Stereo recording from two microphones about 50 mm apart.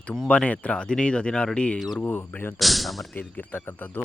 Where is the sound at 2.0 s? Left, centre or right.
Left.